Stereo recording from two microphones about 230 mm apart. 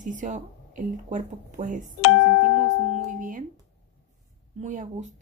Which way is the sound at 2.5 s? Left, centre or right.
Right.